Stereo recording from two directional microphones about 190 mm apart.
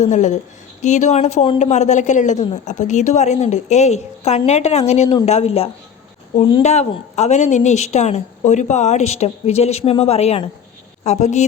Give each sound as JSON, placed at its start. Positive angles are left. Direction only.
{"t": 0.0, "sound": "a woman's voice", "side_deg": 40}